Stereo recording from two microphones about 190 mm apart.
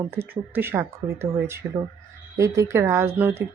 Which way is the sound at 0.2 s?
10° right (ahead or behind).